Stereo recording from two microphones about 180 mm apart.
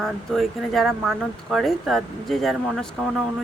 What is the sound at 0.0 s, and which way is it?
Speech, centre (ahead or behind).